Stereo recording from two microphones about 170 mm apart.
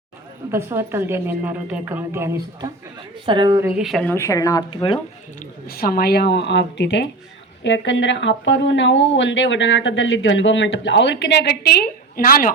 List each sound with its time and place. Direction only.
0.5 s a woman's voice: 15° right (ahead or behind)
3.2 s speech: 25° right (ahead or behind)
3.6 s speech: 5° right (ahead or behind)
4.1 s speech: 20° left (ahead or behind)
5.6 s speech: 60° left (ahead or behind)